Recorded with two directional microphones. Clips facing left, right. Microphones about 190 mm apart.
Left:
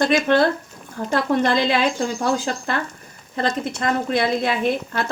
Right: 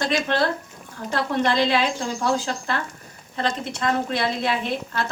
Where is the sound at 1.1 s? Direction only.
45° left (ahead or behind).